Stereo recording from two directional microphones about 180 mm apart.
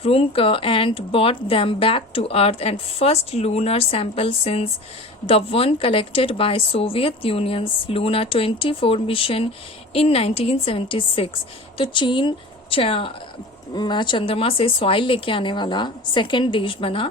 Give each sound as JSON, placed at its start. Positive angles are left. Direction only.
{"t": 0.0, "sound": "a woman's voice", "side_deg": 30}